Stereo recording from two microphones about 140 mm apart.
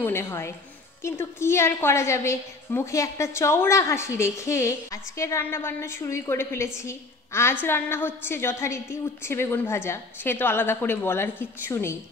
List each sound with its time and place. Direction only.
0.0 s a woman's voice: 20° left (ahead or behind)